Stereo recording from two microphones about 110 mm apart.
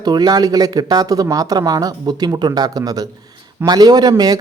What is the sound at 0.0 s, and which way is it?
Speech, 40° right (ahead or behind).